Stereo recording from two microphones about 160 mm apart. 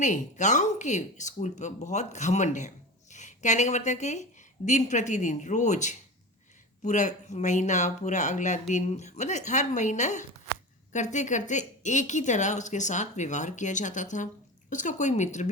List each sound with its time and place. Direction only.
0.0 s a woman's voice: 50° left (ahead or behind)